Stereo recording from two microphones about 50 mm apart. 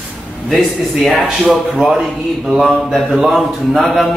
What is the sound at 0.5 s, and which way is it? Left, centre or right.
Speech, centre.